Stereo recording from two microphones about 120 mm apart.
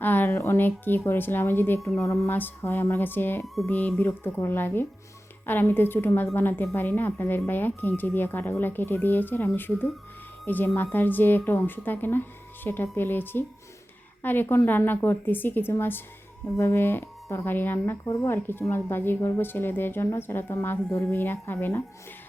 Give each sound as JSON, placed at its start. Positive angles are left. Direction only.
{"t": 0.0, "sound": "a woman's voice", "side_deg": 15}
{"t": 3.4, "sound": "speech", "side_deg": 0}
{"t": 3.7, "sound": "speech", "side_deg": 15}